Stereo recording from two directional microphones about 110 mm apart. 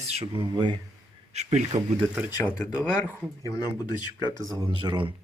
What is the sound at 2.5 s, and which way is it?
Speech, 15° left (ahead or behind).